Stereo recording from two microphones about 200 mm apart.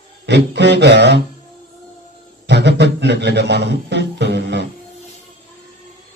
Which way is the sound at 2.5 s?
60° right (ahead or behind).